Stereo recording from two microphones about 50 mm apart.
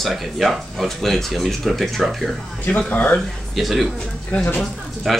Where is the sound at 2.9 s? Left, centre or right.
Left.